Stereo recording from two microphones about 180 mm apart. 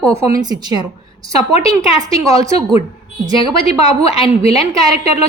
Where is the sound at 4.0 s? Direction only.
35° left (ahead or behind).